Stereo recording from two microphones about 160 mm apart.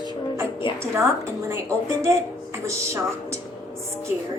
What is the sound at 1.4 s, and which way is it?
Speech, 15° right (ahead or behind).